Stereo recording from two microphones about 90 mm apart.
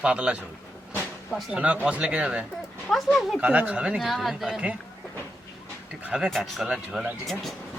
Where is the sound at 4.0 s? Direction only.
Centre (ahead or behind).